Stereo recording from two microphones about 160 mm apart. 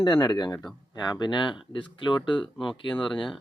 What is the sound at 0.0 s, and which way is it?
Speech, 25° left (ahead or behind).